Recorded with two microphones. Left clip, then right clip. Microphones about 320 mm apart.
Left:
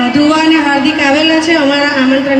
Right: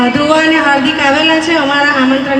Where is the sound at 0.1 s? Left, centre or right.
Centre.